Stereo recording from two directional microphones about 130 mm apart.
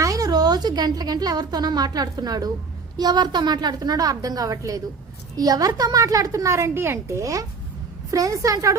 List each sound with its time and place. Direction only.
0.0 s a woman's voice: 30° right (ahead or behind)